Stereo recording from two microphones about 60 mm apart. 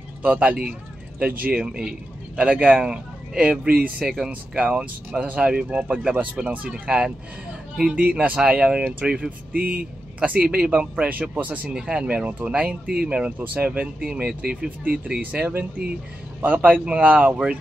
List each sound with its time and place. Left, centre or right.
0.2 s speech: right
1.6 s a man's voice: centre
4.0 s speech: centre
4.6 s speech: centre
5.7 s speech: right
11.7 s speech: centre
15.4 s speech: right